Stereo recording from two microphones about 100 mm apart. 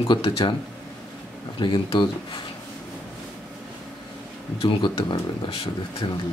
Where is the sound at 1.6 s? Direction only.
55° left (ahead or behind).